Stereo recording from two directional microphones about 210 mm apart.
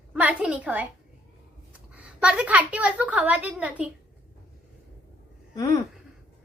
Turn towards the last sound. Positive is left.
turn(degrees=15)  # may be behind; listen again after turning